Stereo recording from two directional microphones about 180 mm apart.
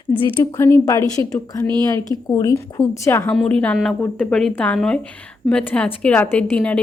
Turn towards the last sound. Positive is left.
turn(degrees=5)  # may be behind; listen again after turning